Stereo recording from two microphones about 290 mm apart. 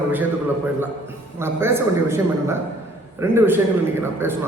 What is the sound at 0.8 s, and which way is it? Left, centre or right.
A man's voice, centre.